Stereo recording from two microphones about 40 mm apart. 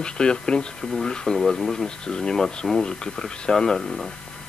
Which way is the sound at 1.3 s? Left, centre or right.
Centre.